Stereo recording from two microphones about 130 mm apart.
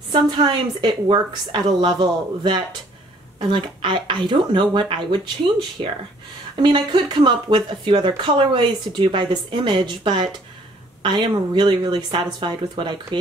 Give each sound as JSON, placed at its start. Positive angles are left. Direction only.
{"t": 0.1, "sound": "a woman's voice", "side_deg": -35}
{"t": 6.5, "sound": "a woman's voice", "side_deg": -40}